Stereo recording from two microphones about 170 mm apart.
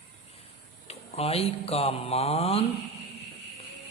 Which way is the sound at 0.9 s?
35° left (ahead or behind).